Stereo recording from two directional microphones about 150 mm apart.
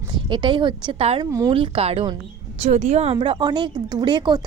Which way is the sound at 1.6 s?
35° right (ahead or behind).